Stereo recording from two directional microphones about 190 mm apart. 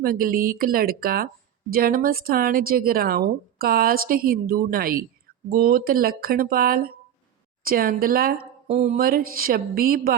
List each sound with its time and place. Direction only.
0.0 s speech: 50° right (ahead or behind)
8.6 s speech: 35° right (ahead or behind)
9.0 s speech: 50° right (ahead or behind)